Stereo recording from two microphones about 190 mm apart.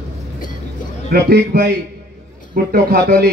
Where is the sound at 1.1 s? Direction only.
55° right (ahead or behind).